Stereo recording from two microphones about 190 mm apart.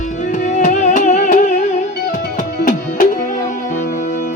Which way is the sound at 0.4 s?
40° left (ahead or behind).